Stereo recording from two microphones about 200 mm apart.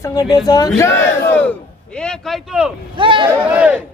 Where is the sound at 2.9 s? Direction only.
25° right (ahead or behind).